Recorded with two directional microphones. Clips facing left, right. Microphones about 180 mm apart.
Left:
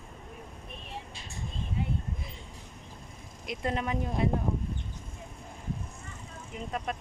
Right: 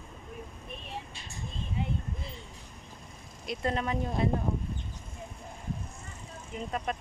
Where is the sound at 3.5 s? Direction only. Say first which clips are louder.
Right 1 dB; 10° left (ahead or behind).